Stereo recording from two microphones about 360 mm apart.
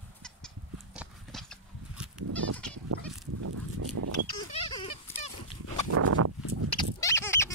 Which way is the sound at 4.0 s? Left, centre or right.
Right.